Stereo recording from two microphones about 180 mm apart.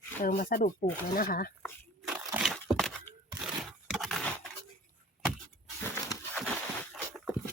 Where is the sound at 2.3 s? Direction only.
Centre (ahead or behind).